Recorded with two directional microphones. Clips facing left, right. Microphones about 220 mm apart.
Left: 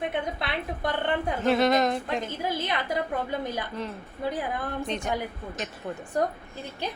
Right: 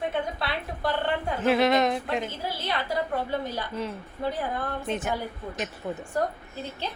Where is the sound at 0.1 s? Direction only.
20° left (ahead or behind).